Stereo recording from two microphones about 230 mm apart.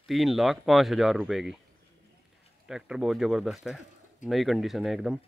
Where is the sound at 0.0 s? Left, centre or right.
Centre.